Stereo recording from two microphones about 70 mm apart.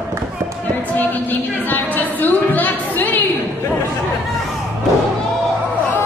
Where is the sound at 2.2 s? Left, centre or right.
Left.